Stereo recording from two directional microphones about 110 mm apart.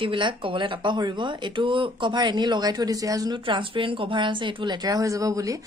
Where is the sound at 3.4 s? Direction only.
50° right (ahead or behind); by 5.5 s 30° right (ahead or behind).